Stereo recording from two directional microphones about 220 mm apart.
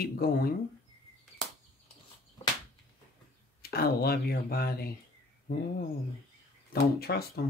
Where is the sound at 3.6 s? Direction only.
45° left (ahead or behind).